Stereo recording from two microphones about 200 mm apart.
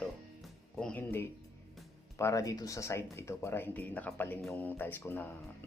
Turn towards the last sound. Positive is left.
turn(degrees=10)  # may be behind; listen again after turning